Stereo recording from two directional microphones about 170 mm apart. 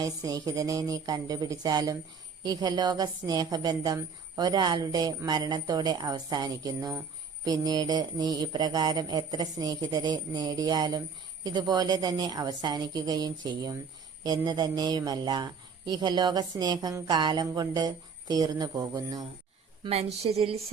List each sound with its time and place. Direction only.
0.0 s a woman's voice: 20° right (ahead or behind)
19.8 s speech: 35° right (ahead or behind)